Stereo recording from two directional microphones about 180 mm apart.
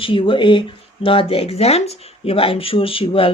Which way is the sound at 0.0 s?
30° left (ahead or behind).